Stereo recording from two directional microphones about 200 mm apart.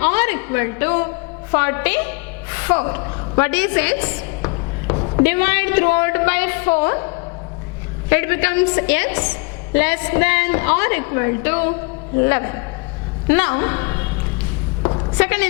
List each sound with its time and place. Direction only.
0.0 s a woman's voice: 10° left (ahead or behind)
4.9 s a sound: 25° left (ahead or behind)
5.2 s a woman's voice: 10° left (ahead or behind)
8.1 s a woman's voice: 15° left (ahead or behind)
14.8 s a sound: 25° left (ahead or behind)
15.2 s a woman's voice: 10° left (ahead or behind)